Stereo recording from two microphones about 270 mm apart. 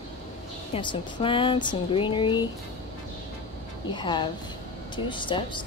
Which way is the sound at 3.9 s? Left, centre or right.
Centre.